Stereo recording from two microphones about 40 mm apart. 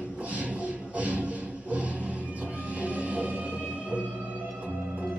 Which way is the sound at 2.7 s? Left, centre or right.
Right.